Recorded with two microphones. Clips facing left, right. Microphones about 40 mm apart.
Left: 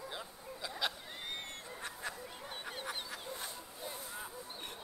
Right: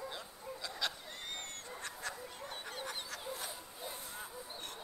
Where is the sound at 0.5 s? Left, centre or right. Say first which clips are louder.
Left 2 dB; centre.